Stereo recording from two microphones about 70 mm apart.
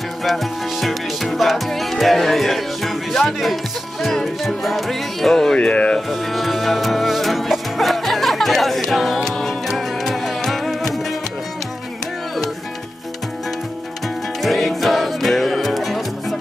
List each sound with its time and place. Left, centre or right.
0.2 s music: centre
5.6 s speech: centre
5.9 s music: centre
14.4 s music: centre